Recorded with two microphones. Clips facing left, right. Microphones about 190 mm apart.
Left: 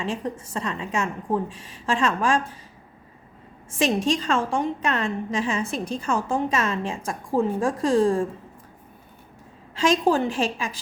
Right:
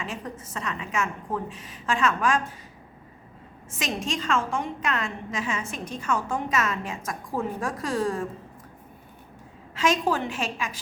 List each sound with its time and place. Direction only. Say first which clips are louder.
0.0 s a woman's voice: left 6 dB; 30° left (ahead or behind)
3.8 s a woman's voice: left 8 dB; 35° left (ahead or behind)
9.7 s a woman's voice: left 4 dB; 30° left (ahead or behind)